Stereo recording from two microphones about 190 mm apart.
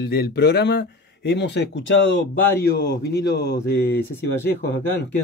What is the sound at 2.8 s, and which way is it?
Speech, 60° left (ahead or behind).